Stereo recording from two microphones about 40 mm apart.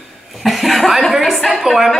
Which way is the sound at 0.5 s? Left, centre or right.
Centre.